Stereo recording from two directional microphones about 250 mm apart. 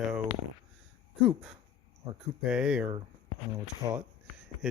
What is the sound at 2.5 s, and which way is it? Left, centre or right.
Speech, centre.